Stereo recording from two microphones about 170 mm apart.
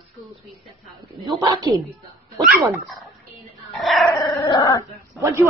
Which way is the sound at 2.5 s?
Centre (ahead or behind).